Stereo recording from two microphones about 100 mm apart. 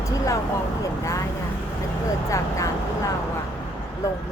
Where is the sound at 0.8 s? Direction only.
35° left (ahead or behind).